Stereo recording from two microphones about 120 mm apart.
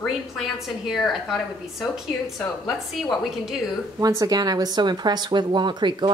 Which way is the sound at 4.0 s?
30° right (ahead or behind).